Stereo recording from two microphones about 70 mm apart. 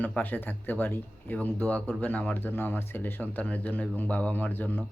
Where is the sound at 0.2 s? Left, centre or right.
Left.